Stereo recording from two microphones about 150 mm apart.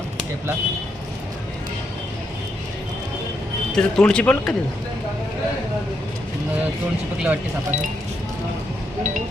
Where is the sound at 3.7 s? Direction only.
5° left (ahead or behind).